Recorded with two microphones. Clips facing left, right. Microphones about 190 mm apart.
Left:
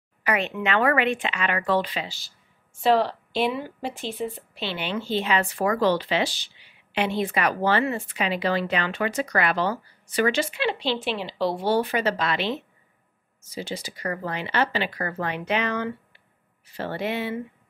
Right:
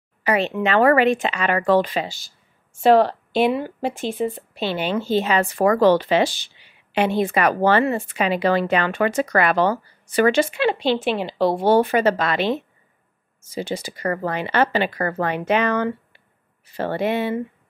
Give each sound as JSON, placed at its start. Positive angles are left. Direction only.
{"t": 0.2, "sound": "speech", "side_deg": -30}
{"t": 13.6, "sound": "speech", "side_deg": -50}